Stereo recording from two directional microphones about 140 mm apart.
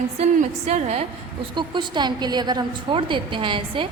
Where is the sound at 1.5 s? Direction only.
35° right (ahead or behind).